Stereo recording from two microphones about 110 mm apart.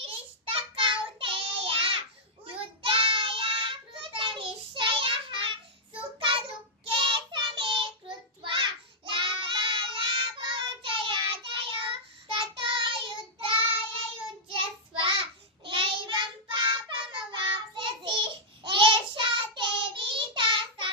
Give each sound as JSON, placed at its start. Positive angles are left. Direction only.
{"t": 0.0, "sound": "child singing", "side_deg": -55}